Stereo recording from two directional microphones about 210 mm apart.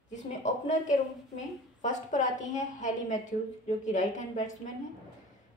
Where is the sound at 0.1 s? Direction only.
35° left (ahead or behind).